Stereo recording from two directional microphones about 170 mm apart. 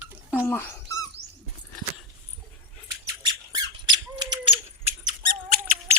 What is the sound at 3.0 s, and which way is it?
Squeak, 25° right (ahead or behind).